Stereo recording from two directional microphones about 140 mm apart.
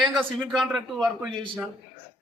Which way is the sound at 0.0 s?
Centre (ahead or behind).